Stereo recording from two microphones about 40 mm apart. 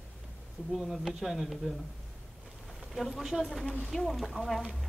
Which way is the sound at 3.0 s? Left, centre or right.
Centre.